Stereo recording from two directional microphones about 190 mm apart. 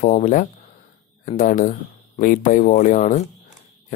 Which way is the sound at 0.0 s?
40° left (ahead or behind).